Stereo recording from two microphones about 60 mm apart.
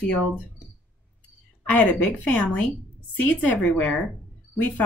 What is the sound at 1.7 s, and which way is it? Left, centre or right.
A woman's voice, left.